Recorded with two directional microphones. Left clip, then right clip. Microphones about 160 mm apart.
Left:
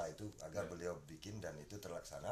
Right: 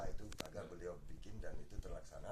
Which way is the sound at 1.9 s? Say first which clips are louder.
Left 5 dB; 5° left (ahead or behind).